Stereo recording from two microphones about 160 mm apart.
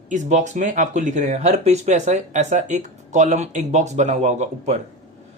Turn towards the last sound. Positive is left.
turn(degrees=-45)  # may be behind; listen again after turning